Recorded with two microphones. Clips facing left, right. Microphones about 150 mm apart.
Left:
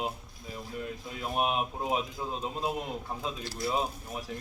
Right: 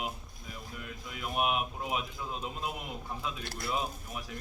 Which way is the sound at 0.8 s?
35° left (ahead or behind).